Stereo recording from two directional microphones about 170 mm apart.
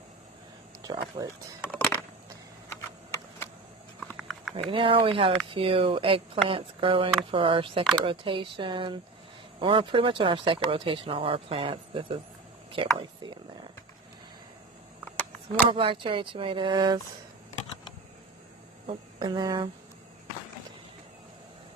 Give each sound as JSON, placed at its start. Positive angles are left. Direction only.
{"t": 0.8, "sound": "speech", "side_deg": -20}
{"t": 2.7, "sound": "typing", "side_deg": 15}
{"t": 4.0, "sound": "horse", "side_deg": 0}
{"t": 4.6, "sound": "speech", "side_deg": -30}
{"t": 15.7, "sound": "speech", "side_deg": -30}
{"t": 18.9, "sound": "speech", "side_deg": -25}